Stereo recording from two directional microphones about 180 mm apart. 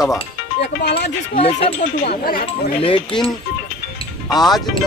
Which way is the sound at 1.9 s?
55° left (ahead or behind).